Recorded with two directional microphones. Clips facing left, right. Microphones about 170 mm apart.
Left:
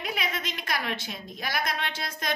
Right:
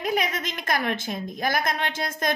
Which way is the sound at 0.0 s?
45° right (ahead or behind).